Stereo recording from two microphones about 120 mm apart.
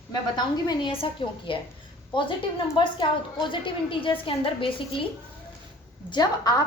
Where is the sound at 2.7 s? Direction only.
40° left (ahead or behind).